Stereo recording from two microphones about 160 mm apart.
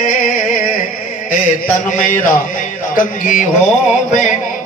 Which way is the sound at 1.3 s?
55° left (ahead or behind).